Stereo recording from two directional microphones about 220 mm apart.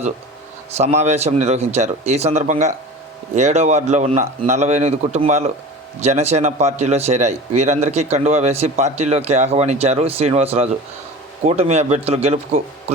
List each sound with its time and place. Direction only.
0.8 s a man's voice: 30° right (ahead or behind)